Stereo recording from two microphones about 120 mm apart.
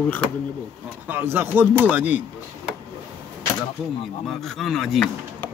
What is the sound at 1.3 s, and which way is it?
Speech, 15° right (ahead or behind).